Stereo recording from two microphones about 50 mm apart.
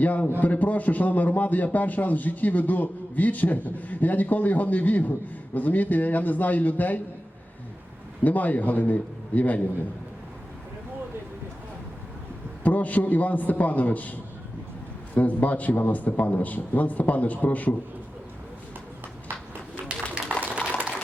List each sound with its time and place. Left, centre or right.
0.0 s a man's voice: left
8.2 s a man's voice: left
12.6 s a man's voice: left
20.3 s a sound: right